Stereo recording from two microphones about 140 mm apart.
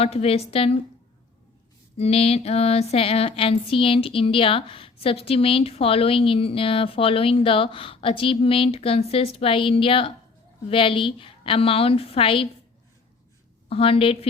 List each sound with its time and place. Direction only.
0.0 s a woman's voice: 45° left (ahead or behind)
2.0 s a sound: 45° left (ahead or behind)
13.7 s a woman's voice: 40° left (ahead or behind)